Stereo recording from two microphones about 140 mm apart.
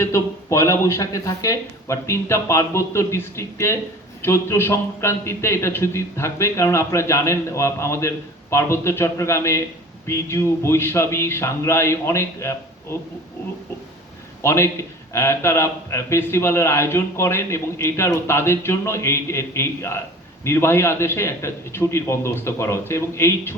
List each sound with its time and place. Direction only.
0.0 s a man's voice: 20° left (ahead or behind)
14.4 s a man's voice: 20° left (ahead or behind)